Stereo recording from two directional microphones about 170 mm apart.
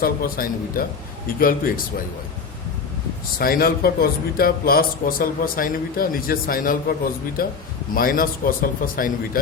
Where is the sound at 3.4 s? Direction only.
60° left (ahead or behind).